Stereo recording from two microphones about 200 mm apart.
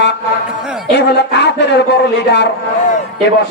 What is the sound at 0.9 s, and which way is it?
Speech, 60° left (ahead or behind).